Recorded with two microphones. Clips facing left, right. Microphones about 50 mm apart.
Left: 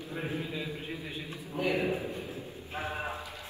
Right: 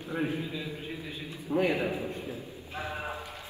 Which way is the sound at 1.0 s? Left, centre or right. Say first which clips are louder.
Even; centre.